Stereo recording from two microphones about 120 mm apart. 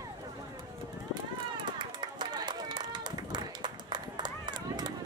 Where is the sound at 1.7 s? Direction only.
40° right (ahead or behind).